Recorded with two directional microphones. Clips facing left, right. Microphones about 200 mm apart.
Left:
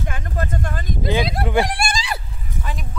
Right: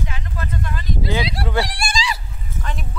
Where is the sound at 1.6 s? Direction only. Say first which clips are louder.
Left 1 dB; 55° left (ahead or behind).